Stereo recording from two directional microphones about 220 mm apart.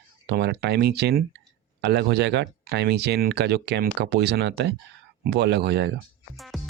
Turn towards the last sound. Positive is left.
turn(degrees=0)  # may be behind; listen again after turning